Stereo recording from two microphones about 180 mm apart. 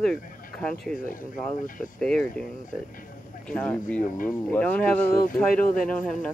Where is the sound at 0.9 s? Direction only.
50° left (ahead or behind).